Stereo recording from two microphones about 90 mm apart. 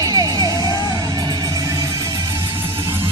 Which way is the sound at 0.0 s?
40° right (ahead or behind).